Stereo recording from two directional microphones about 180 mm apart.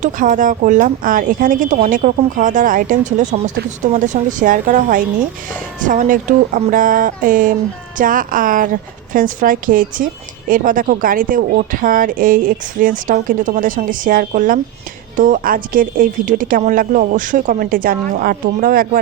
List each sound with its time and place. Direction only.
0.0 s a woman's voice: 45° right (ahead or behind)